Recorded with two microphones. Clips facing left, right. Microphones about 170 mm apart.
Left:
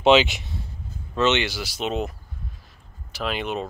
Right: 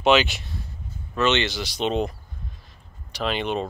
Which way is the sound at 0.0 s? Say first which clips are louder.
Left 2 dB; 20° left (ahead or behind).